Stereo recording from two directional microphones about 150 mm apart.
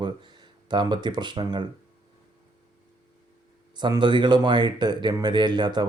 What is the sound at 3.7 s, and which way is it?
Speech, 30° right (ahead or behind).